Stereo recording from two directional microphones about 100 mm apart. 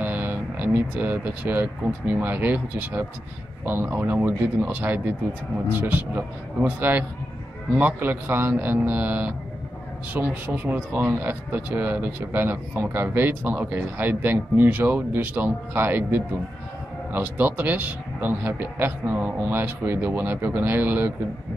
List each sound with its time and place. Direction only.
0.0 s speech: 20° right (ahead or behind)